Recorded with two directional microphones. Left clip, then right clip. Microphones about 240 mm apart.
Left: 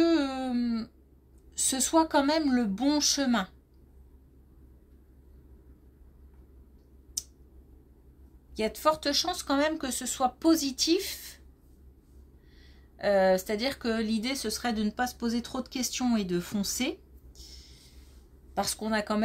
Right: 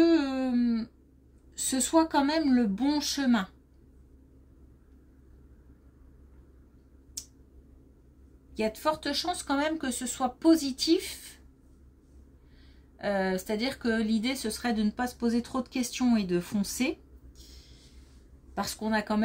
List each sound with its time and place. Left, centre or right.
0.0 s a sound: left
1.6 s speech: left
8.5 s speech: left
12.9 s speech: left
18.5 s speech: left